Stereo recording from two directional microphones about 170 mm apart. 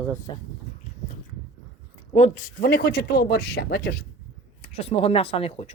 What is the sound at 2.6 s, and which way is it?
Speech, 65° left (ahead or behind).